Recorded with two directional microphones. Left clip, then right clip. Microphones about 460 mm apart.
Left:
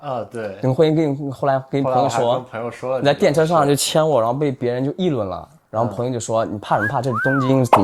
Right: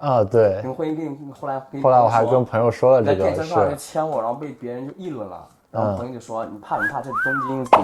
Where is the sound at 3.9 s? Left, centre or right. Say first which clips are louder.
Left 7 dB; left.